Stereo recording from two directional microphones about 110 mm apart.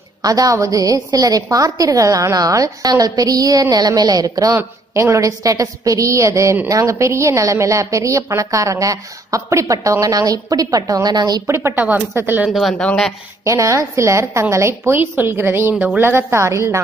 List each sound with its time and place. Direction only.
0.2 s a woman's voice: 35° right (ahead or behind)
11.5 s a woman's voice: 25° right (ahead or behind)
12.4 s speech: centre (ahead or behind)
13.4 s a woman's voice: 30° right (ahead or behind)